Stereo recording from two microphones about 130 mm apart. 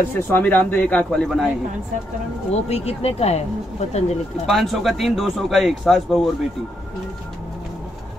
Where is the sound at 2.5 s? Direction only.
55° left (ahead or behind).